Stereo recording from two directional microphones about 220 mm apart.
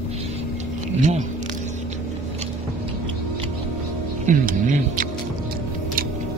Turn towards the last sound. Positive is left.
turn(degrees=-40)  # may be behind; listen again after turning